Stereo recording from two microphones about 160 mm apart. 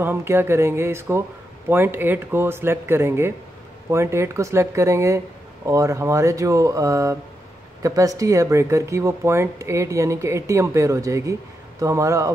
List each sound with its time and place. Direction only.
0.0 s speech: 15° right (ahead or behind)